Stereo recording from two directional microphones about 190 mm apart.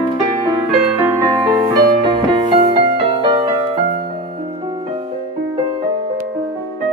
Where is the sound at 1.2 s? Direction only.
20° right (ahead or behind).